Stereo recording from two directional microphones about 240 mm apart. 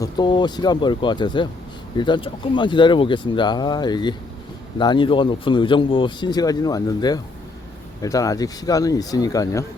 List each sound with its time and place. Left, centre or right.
0.0 s speech: centre